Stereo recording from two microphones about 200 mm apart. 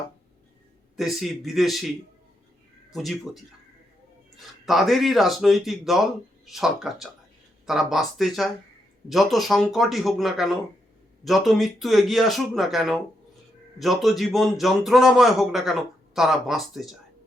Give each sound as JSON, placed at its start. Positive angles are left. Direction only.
{"t": 0.9, "sound": "speech", "side_deg": 0}
{"t": 2.9, "sound": "speech", "side_deg": 0}